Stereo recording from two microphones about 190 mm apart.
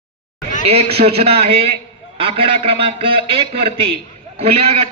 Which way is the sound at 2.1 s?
30° right (ahead or behind).